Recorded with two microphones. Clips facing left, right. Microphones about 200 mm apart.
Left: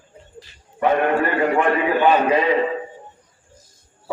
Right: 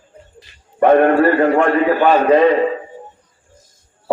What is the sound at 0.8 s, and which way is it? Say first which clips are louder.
Speech: right 7 dB; 50° right (ahead or behind).